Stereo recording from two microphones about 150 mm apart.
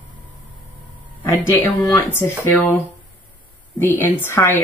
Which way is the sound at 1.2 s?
15° left (ahead or behind).